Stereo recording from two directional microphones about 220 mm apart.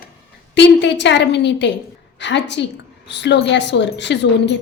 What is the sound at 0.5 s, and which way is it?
A woman's voice, 55° left (ahead or behind).